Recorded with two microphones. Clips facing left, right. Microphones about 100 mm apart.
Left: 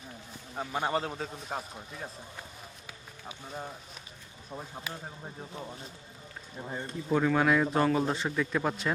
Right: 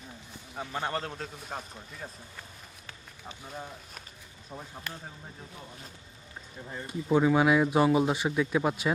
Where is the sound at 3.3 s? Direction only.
5° left (ahead or behind).